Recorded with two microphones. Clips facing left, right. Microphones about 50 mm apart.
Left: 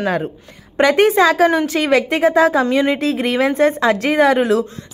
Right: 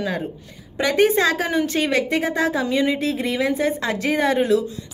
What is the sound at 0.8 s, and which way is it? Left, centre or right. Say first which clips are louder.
A woman's voice: left 5 dB; left.